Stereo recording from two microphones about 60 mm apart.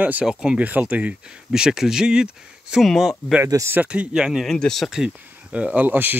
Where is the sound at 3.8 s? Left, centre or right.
Right.